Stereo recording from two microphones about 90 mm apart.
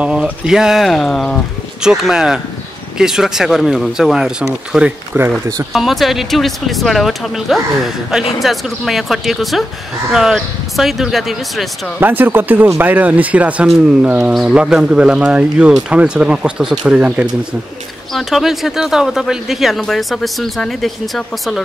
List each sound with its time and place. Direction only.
0.0 s speech: 10° right (ahead or behind); by 1.4 s 5° left (ahead or behind)
1.8 s speech: 5° right (ahead or behind)
5.1 s speech: 20° right (ahead or behind)
5.7 s speech: centre (ahead or behind)
12.0 s speech: 20° right (ahead or behind)
14.3 s speech: 5° right (ahead or behind)